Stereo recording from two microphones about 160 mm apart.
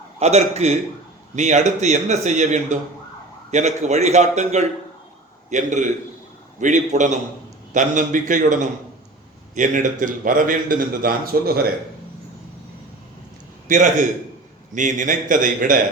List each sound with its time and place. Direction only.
0.2 s a man's voice: 40° right (ahead or behind); by 11.6 s 70° right (ahead or behind)
13.7 s a man's voice: 55° right (ahead or behind)